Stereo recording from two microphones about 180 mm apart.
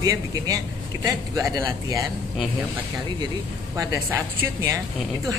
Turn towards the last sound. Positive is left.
turn(degrees=-15)  # may be behind; listen again after turning